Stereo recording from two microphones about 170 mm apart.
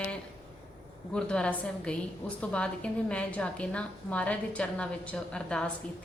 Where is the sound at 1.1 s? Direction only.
5° left (ahead or behind).